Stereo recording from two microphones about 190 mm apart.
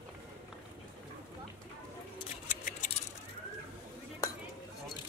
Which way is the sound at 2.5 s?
45° left (ahead or behind).